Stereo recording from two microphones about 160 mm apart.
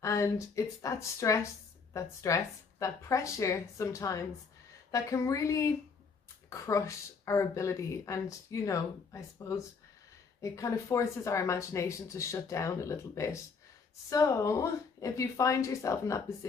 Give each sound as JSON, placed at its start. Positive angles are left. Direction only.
{"t": 0.0, "sound": "a woman's voice", "side_deg": 20}